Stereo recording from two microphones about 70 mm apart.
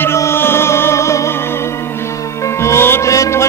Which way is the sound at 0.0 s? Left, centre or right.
Left.